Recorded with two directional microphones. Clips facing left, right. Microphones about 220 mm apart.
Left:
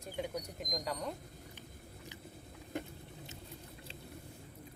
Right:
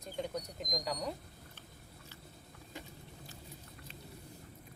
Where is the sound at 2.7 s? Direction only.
60° left (ahead or behind).